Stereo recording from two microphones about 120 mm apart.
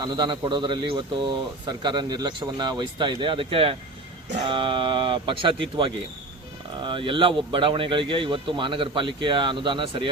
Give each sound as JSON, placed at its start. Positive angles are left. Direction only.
{"t": 0.0, "sound": "speech", "side_deg": -40}